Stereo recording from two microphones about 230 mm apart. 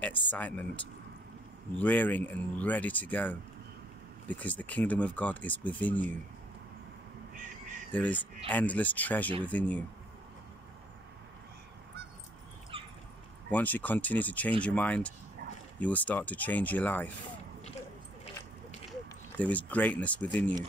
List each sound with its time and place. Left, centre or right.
0.0 s speech: centre
7.9 s speech: centre
12.7 s dog: right
13.5 s speech: centre
18.9 s speech: centre